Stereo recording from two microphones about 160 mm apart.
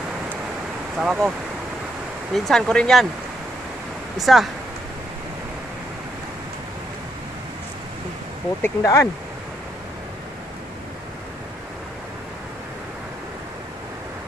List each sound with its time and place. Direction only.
0.9 s speech: centre (ahead or behind)
2.3 s speech: centre (ahead or behind)
4.2 s speech: centre (ahead or behind)
8.6 s speech: 15° left (ahead or behind)